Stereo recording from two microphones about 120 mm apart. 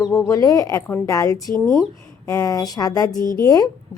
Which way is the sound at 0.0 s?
25° left (ahead or behind).